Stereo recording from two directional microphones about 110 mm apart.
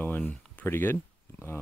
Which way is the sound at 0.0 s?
15° left (ahead or behind).